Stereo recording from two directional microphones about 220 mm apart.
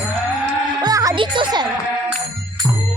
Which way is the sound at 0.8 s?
15° right (ahead or behind).